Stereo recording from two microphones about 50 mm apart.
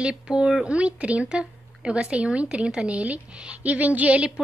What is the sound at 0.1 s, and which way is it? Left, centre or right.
Speech, centre.